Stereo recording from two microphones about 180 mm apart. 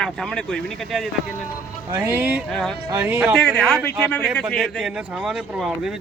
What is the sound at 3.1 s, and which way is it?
Speech, 5° right (ahead or behind).